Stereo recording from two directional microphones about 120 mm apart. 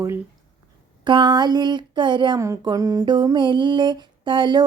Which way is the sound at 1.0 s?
40° right (ahead or behind).